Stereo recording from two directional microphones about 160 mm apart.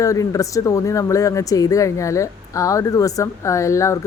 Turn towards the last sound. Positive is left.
turn(degrees=20)  # may be behind; listen again after turning